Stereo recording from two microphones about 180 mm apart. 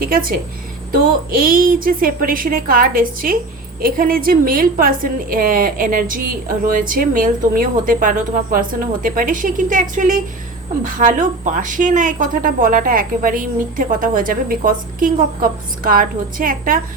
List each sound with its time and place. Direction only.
0.0 s a woman's voice: 55° right (ahead or behind)